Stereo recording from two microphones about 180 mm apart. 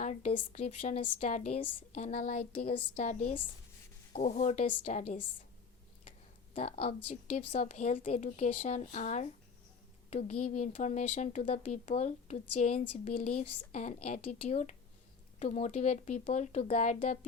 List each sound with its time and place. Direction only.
0.0 s speech: 40° left (ahead or behind)
2.9 s speech: 40° left (ahead or behind)
6.5 s speech: 35° left (ahead or behind)